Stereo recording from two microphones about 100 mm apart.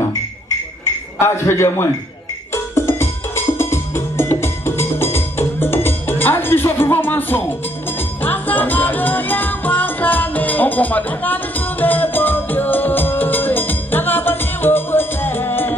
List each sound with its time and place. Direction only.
1.2 s a man's voice: 25° left (ahead or behind)
2.5 s music: 25° left (ahead or behind)